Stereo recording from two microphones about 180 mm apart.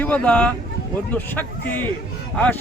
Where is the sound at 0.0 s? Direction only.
5° left (ahead or behind).